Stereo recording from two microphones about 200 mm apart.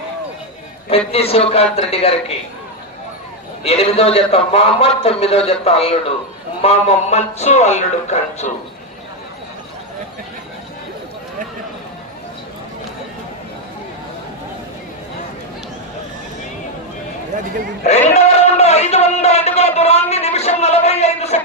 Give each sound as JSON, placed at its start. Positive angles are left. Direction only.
{"t": 0.9, "sound": "a man's voice", "side_deg": 30}
{"t": 3.6, "sound": "a man's voice", "side_deg": 30}
{"t": 18.1, "sound": "speech", "side_deg": 35}